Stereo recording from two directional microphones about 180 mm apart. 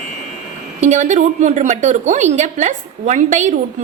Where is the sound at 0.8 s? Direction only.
40° right (ahead or behind).